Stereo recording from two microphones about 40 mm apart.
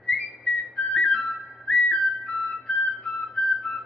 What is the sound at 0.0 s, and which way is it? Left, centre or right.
Whistle, centre.